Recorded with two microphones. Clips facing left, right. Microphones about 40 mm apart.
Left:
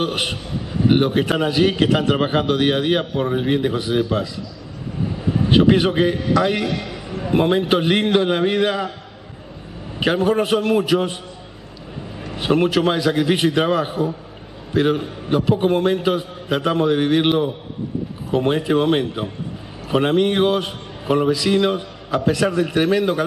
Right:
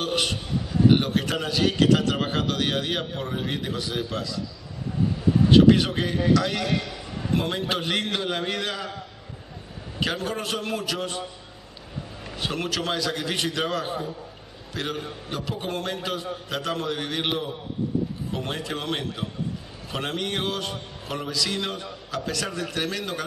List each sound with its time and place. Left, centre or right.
0.0 s a man's voice: left
5.3 s a man's voice: left
9.9 s a man's voice: left
12.4 s a man's voice: left
18.3 s a man's voice: left